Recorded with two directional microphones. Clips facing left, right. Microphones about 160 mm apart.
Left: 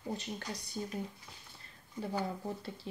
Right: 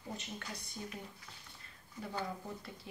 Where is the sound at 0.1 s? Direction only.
35° left (ahead or behind).